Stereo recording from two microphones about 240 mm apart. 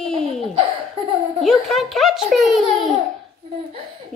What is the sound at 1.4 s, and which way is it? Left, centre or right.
A woman's voice, centre.